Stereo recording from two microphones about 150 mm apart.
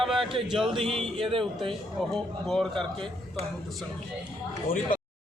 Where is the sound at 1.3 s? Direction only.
35° right (ahead or behind).